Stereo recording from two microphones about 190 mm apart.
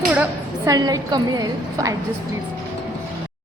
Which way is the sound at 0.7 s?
20° right (ahead or behind).